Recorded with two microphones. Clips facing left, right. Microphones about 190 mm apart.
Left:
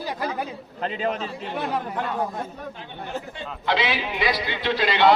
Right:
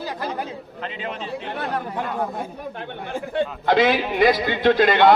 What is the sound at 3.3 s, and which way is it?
A man's voice, 55° right (ahead or behind).